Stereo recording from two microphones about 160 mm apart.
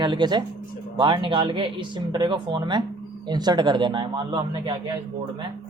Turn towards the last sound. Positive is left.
turn(degrees=-30)  # may be behind; listen again after turning